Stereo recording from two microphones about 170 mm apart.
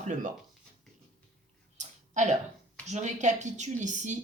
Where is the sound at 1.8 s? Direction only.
45° right (ahead or behind).